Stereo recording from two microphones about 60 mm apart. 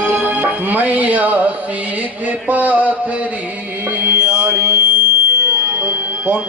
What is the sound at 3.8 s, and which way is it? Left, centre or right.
Mantra, right.